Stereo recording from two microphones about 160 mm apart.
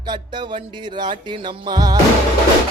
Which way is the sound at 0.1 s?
30° right (ahead or behind).